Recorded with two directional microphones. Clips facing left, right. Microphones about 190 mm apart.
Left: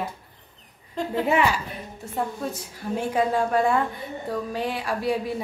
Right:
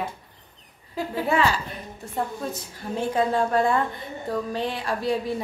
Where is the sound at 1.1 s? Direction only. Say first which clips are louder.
Left 1 dB; 20° left (ahead or behind).